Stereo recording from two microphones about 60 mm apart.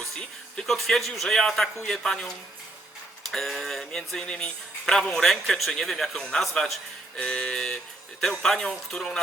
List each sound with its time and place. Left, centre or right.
0.0 s music: centre
0.7 s speech: centre
3.3 s speech: centre
5.2 s speech: centre
7.2 s speech: centre